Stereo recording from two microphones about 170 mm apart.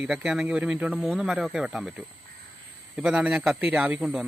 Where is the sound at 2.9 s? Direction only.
5° right (ahead or behind).